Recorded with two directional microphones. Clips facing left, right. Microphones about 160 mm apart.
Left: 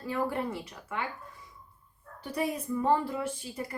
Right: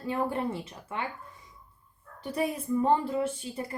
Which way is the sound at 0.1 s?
25° right (ahead or behind).